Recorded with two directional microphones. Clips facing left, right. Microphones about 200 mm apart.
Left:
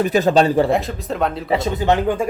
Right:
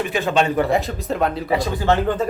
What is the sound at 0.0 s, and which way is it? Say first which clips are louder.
Speech: left 5 dB; 40° left (ahead or behind).